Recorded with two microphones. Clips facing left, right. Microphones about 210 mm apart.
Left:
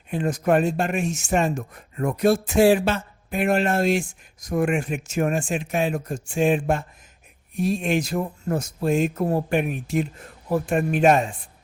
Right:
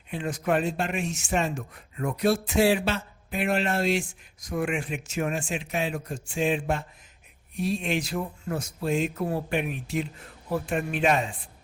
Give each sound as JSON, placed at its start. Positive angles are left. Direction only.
{"t": 0.1, "sound": "speech", "side_deg": 45}